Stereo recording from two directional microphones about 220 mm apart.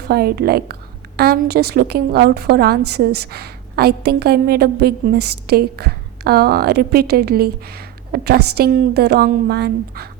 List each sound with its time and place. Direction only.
0.1 s a woman's voice: 45° right (ahead or behind)